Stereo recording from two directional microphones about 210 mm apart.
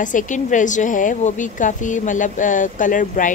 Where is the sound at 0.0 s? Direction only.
35° left (ahead or behind).